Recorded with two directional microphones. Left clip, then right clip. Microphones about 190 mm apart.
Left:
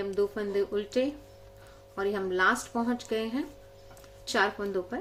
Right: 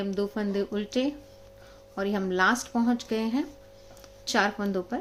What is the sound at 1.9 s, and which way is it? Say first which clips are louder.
Speech: right 1 dB; 40° right (ahead or behind).